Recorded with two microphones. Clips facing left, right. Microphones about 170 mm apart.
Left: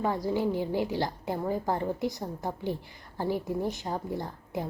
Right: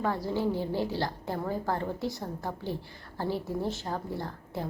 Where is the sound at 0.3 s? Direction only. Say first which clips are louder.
Left 1 dB; 15° left (ahead or behind).